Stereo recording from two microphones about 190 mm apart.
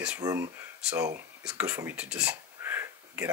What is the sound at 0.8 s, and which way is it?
Speech, 5° right (ahead or behind).